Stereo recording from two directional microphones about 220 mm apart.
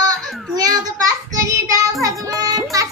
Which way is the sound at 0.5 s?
15° right (ahead or behind).